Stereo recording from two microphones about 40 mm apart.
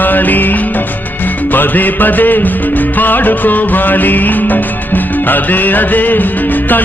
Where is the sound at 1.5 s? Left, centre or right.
Left.